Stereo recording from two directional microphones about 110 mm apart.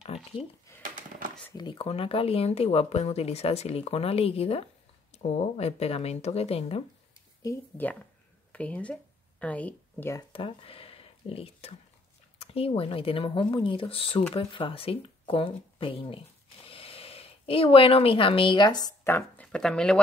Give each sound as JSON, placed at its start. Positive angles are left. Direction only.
{"t": 0.7, "sound": "a sound", "side_deg": 25}
{"t": 1.5, "sound": "speech", "side_deg": 40}
{"t": 1.8, "sound": "speech", "side_deg": 55}
{"t": 5.1, "sound": "speech", "side_deg": 75}
{"t": 7.7, "sound": "speech", "side_deg": 15}
{"t": 10.3, "sound": "speech", "side_deg": 55}
{"t": 19.0, "sound": "speech", "side_deg": 20}
{"t": 19.4, "sound": "speech", "side_deg": 5}